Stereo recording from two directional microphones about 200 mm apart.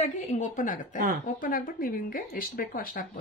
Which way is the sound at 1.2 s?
45° left (ahead or behind).